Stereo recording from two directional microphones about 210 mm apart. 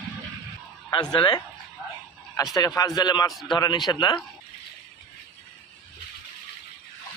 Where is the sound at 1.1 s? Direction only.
25° left (ahead or behind).